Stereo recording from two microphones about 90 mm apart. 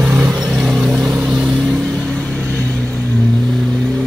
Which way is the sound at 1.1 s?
15° right (ahead or behind).